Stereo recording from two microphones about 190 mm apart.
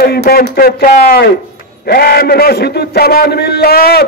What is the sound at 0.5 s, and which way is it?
A man's voice, 55° left (ahead or behind).